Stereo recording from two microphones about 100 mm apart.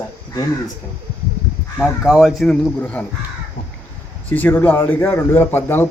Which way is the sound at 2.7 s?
15° left (ahead or behind).